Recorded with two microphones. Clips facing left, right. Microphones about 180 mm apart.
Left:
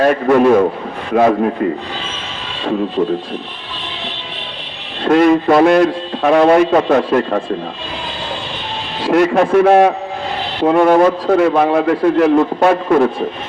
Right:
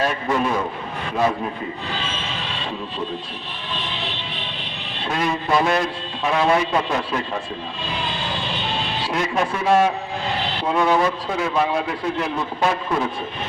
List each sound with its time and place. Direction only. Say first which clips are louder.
0.0 s a man's voice: left 11 dB; 60° left (ahead or behind)
5.0 s a man's voice: left 13 dB; 60° left (ahead or behind)
9.0 s a man's voice: left 12 dB; 65° left (ahead or behind)